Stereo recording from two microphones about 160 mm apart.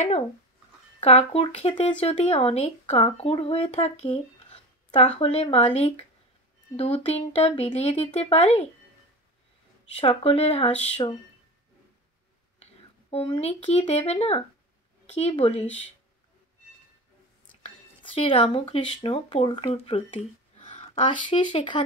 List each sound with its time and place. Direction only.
1.0 s speech: 40° left (ahead or behind)
9.9 s speech: 40° left (ahead or behind)
11.0 s speech: 30° left (ahead or behind)
13.1 s speech: 35° left (ahead or behind)
17.6 s speech: 35° left (ahead or behind)
20.6 s a sound: 45° left (ahead or behind)
21.0 s speech: 30° left (ahead or behind)